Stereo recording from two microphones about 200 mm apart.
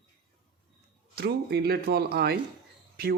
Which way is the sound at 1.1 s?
55° right (ahead or behind).